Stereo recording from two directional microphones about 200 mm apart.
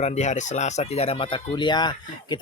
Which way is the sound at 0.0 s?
35° left (ahead or behind).